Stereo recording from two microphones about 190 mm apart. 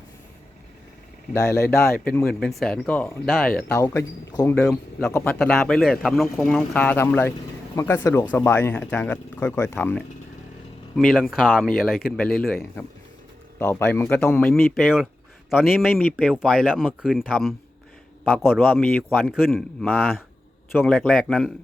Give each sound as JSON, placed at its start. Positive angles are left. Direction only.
{"t": 1.3, "sound": "speech", "side_deg": 15}
{"t": 3.8, "sound": "speech", "side_deg": 15}
{"t": 4.5, "sound": "speech", "side_deg": 5}
{"t": 6.6, "sound": "speech", "side_deg": 10}
{"t": 18.7, "sound": "speech", "side_deg": 10}